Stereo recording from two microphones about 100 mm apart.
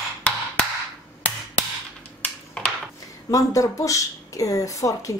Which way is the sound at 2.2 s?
10° left (ahead or behind).